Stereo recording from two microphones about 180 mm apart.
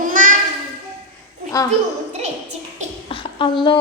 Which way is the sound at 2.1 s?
40° right (ahead or behind).